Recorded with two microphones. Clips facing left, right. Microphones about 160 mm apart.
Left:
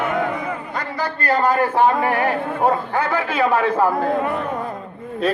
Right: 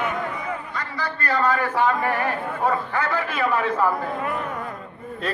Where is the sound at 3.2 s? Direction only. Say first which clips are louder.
Left 6 dB; 85° left.